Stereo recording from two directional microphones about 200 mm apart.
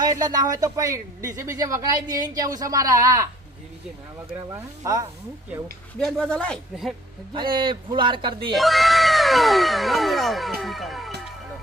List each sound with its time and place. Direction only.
0.0 s speech: 20° right (ahead or behind)
4.5 s speech: 15° right (ahead or behind)
6.0 s speech: 5° left (ahead or behind)
7.3 s a man's voice: 25° right (ahead or behind)
8.5 s speech: centre (ahead or behind)